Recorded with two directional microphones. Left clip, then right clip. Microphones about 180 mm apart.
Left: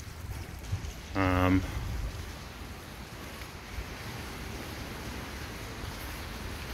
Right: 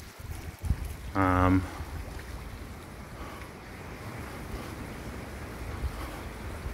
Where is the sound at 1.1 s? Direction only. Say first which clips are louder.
Right 2 dB; 10° right (ahead or behind).